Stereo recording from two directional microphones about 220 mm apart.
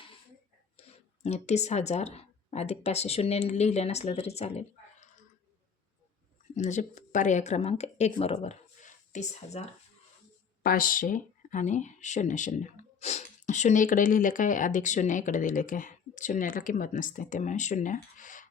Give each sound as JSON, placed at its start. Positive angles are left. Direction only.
{"t": 0.8, "sound": "speech", "side_deg": 30}
{"t": 6.6, "sound": "speech", "side_deg": 35}